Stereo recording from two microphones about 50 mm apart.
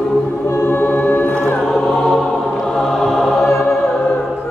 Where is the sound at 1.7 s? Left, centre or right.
Centre.